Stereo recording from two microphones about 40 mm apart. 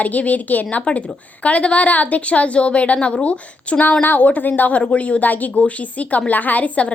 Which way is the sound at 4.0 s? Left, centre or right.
Left.